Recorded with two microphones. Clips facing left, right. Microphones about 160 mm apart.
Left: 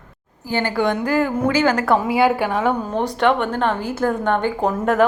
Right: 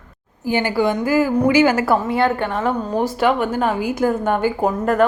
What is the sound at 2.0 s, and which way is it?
A woman's voice, 5° left (ahead or behind).